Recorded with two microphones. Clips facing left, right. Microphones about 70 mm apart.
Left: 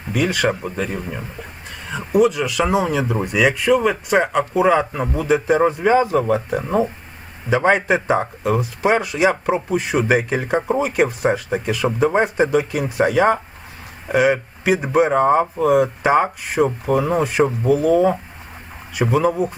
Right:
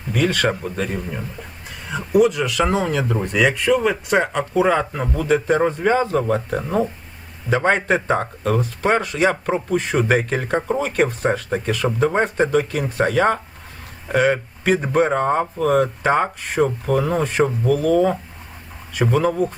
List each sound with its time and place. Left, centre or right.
0.1 s speech: centre